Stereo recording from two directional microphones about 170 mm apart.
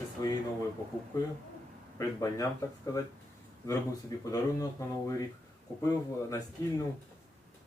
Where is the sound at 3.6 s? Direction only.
20° left (ahead or behind).